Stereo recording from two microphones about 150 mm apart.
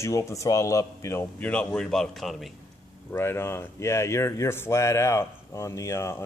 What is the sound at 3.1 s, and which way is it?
Speech, 15° left (ahead or behind).